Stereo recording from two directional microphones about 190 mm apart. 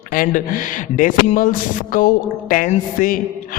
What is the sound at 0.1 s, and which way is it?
A man's voice, 45° left (ahead or behind).